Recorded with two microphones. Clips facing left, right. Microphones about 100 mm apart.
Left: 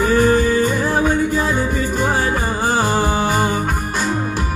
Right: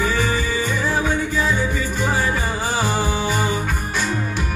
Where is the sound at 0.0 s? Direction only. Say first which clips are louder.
Left 7 dB; 50° left (ahead or behind).